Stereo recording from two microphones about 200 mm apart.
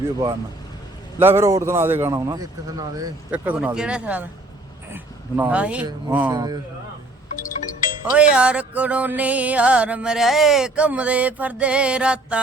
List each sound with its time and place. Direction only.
1.2 s a man's voice: 10° right (ahead or behind)
3.3 s a man's voice: 5° right (ahead or behind)
6.3 s speech: 20° right (ahead or behind)
8.1 s music: 5° right (ahead or behind)